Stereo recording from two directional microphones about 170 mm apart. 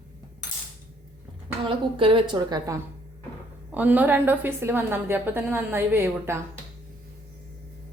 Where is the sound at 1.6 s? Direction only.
30° right (ahead or behind).